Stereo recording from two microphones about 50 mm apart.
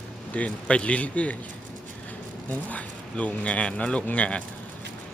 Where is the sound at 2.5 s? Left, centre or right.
Left.